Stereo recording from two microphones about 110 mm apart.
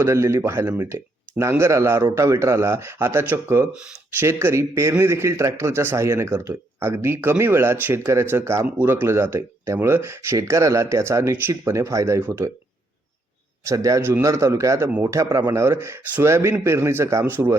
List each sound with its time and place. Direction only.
0.0 s a man's voice: 25° right (ahead or behind)
3.7 s speech: 10° right (ahead or behind)
4.2 s a man's voice: 25° right (ahead or behind)
13.7 s a man's voice: 30° right (ahead or behind)